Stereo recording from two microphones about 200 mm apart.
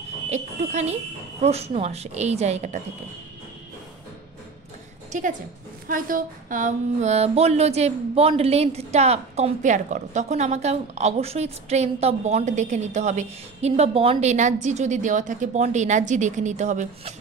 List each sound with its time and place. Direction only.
0.3 s speech: 35° right (ahead or behind)
5.9 s speech: 45° right (ahead or behind)